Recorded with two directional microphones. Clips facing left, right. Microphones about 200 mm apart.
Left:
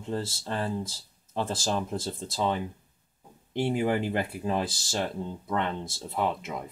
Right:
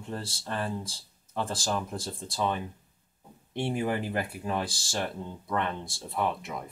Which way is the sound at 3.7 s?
20° left (ahead or behind).